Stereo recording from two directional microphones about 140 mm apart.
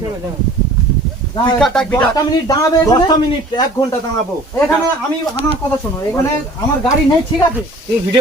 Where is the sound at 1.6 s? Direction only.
5° left (ahead or behind).